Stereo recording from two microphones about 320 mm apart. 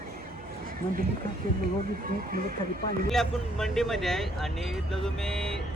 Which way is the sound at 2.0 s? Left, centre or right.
Right.